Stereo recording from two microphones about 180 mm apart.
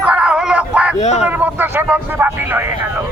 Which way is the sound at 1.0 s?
40° left (ahead or behind).